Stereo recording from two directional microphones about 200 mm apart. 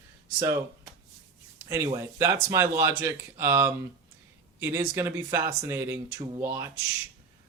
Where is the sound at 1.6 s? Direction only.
15° right (ahead or behind).